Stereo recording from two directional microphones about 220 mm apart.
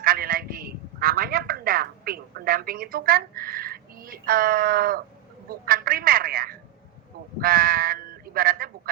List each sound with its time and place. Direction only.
0.0 s telephone: 40° right (ahead or behind)
5.5 s a man's voice: 40° right (ahead or behind)